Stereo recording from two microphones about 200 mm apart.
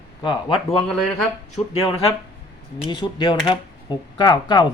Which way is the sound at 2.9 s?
20° left (ahead or behind).